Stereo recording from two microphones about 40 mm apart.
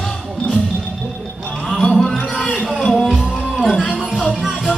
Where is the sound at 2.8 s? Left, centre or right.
Centre.